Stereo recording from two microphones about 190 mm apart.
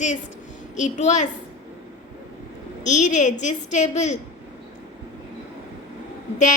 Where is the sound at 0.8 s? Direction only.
40° left (ahead or behind).